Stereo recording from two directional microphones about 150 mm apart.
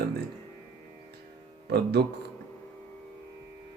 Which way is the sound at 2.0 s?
90° right.